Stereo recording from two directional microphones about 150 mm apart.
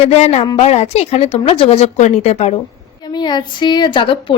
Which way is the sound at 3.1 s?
30° left (ahead or behind).